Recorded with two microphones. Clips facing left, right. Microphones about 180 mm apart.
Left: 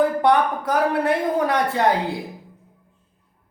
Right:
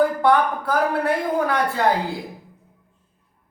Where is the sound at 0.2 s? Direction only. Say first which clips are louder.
Even; 20° left (ahead or behind).